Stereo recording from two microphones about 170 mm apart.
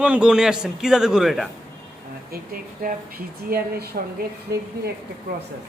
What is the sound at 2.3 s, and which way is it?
Speech, 60° right (ahead or behind).